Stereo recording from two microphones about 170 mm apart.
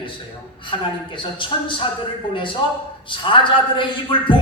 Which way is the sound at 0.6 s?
30° left (ahead or behind).